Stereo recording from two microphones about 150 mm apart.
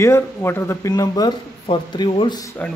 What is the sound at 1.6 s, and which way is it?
Speech, 35° left (ahead or behind).